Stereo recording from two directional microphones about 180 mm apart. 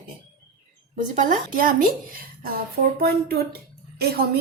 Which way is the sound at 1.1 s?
50° right (ahead or behind).